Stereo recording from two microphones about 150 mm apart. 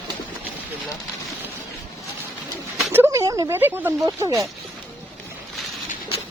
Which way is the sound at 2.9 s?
20° right (ahead or behind).